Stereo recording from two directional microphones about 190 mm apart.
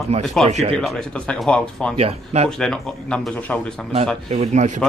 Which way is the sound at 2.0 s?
35° right (ahead or behind).